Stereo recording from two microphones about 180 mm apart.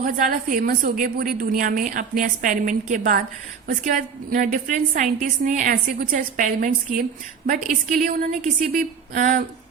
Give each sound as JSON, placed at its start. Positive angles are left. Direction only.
{"t": 0.0, "sound": "a woman's voice", "side_deg": -50}